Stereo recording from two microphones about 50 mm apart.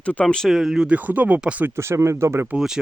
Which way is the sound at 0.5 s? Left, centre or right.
Centre.